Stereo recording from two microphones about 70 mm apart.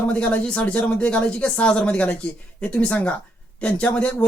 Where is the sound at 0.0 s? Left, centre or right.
Left.